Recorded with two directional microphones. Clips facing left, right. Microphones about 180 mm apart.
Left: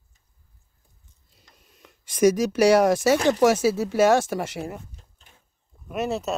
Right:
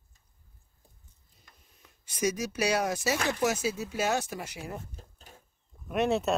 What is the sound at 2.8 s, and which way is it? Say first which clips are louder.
Speech: left 10 dB; 75° left (ahead or behind).